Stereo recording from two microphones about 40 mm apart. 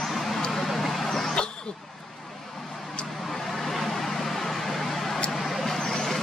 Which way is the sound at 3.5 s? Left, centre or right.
Centre.